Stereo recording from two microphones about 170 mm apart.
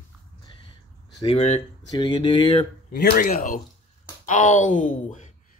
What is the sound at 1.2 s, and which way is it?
Speech, 40° left (ahead or behind).